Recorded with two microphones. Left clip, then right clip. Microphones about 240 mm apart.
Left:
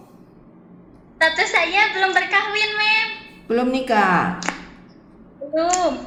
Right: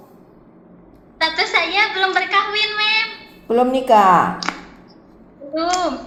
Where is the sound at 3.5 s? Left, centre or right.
Centre.